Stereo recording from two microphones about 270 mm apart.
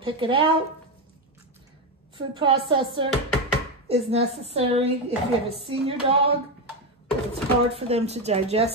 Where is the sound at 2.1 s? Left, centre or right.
Centre.